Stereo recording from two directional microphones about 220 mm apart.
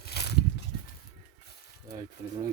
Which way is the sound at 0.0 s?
50° left (ahead or behind).